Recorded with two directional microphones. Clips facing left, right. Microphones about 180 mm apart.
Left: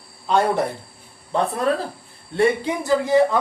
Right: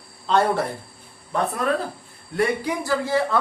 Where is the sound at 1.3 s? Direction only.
30° left (ahead or behind).